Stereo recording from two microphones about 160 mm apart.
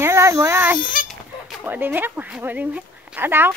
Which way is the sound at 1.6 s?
10° right (ahead or behind).